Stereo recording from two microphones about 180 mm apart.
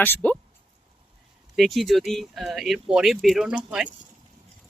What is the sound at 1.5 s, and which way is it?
Speech, centre (ahead or behind).